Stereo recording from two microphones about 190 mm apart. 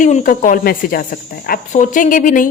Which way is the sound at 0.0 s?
40° left (ahead or behind).